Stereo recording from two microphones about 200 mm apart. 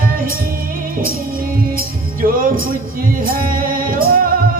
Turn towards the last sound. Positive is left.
turn(degrees=-45)  # may be behind; listen again after turning